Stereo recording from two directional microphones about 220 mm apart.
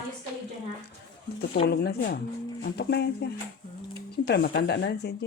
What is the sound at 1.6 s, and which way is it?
A woman's voice, 45° left (ahead or behind).